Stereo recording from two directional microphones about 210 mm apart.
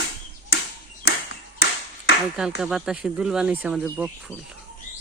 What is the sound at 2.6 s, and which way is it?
Speech, 5° right (ahead or behind).